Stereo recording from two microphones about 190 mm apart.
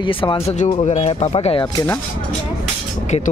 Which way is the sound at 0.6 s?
40° left (ahead or behind).